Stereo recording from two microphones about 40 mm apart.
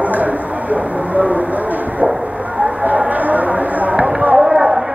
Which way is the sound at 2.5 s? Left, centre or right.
Right.